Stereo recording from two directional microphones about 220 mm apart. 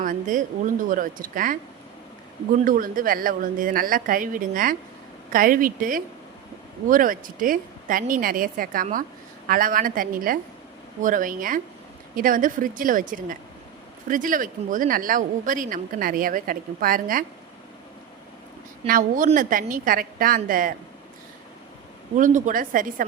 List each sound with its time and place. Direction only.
0.0 s a woman's voice: 35° right (ahead or behind)
2.6 s a woman's voice: 40° right (ahead or behind)
18.9 s a woman's voice: 40° right (ahead or behind)
22.1 s a woman's voice: 35° right (ahead or behind)